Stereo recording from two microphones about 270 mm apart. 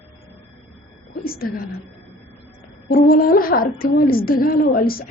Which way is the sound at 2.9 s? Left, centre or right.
Left.